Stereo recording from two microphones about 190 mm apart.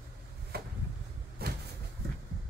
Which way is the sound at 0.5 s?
55° right (ahead or behind).